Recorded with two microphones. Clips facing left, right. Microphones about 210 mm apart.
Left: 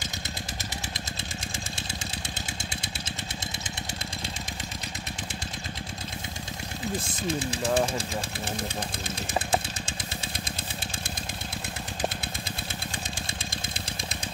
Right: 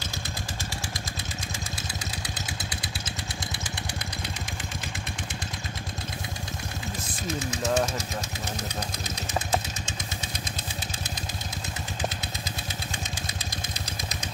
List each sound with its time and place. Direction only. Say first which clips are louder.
2.2 s vehicle: right 1 dB; 25° left (ahead or behind)
7.0 s engine: even; 30° left (ahead or behind)